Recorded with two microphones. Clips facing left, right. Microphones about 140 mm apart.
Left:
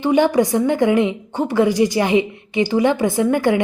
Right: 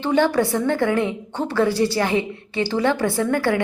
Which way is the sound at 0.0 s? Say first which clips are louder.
Left 3 dB; 15° left (ahead or behind).